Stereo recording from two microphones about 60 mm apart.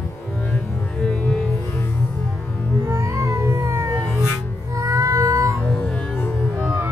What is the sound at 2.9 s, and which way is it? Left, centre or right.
Music, right.